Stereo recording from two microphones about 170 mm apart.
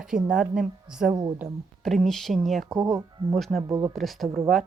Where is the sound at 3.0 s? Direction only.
25° right (ahead or behind).